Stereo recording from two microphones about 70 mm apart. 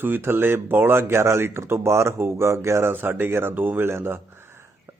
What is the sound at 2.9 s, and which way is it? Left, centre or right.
Speech, right.